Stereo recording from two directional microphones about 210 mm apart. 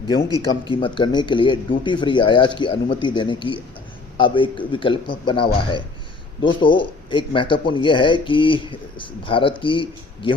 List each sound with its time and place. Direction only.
0.6 s speech: 25° left (ahead or behind)